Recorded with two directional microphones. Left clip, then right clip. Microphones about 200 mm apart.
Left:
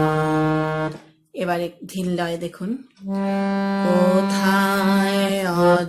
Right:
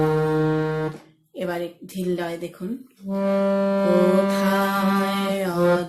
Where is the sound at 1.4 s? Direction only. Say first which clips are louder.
Left 4 dB; 30° left (ahead or behind).